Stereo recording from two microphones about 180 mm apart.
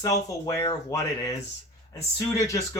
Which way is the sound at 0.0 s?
20° left (ahead or behind).